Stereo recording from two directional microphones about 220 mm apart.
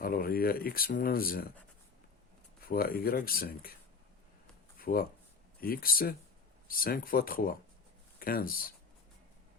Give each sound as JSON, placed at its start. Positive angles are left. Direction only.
{"t": 0.0, "sound": "speech", "side_deg": 40}
{"t": 2.6, "sound": "speech", "side_deg": 40}
{"t": 4.8, "sound": "speech", "side_deg": 40}